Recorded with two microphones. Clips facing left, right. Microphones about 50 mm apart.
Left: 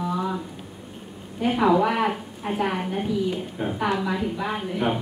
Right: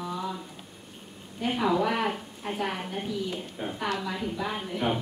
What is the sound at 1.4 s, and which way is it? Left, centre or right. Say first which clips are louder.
A woman's voice: left 6 dB; centre.